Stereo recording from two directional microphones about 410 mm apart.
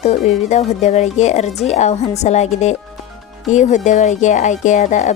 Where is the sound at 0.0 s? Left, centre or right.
Centre.